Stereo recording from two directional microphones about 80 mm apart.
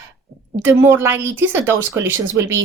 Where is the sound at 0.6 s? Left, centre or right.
Right.